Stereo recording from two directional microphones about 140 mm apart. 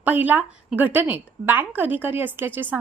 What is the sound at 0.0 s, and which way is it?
A woman's voice, 10° right (ahead or behind).